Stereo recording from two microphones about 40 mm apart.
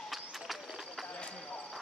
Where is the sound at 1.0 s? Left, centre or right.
Left.